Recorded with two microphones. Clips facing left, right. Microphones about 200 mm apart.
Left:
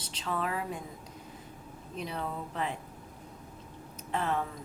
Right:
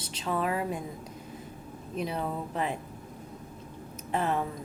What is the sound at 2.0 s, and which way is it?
Speech, 10° right (ahead or behind).